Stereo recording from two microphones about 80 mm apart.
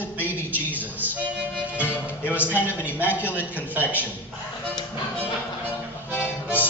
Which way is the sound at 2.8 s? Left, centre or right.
Left.